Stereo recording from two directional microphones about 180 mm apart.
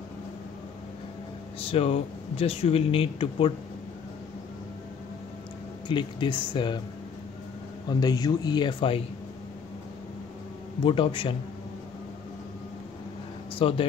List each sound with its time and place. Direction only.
1.7 s speech: 35° left (ahead or behind)
5.9 s speech: 25° left (ahead or behind)
7.9 s speech: 20° left (ahead or behind)
10.8 s speech: 30° left (ahead or behind)
13.6 s speech: 30° left (ahead or behind)